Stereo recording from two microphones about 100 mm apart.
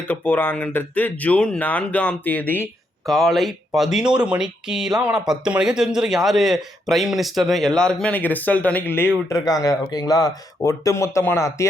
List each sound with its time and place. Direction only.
0.1 s speech: 20° left (ahead or behind)
3.1 s speech: centre (ahead or behind); by 9.0 s 20° left (ahead or behind)
9.3 s speech: 40° left (ahead or behind)